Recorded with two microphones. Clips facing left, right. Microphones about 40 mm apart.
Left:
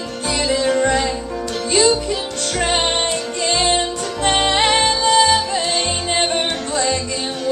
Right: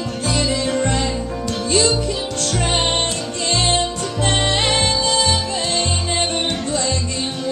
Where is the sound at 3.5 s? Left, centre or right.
Centre.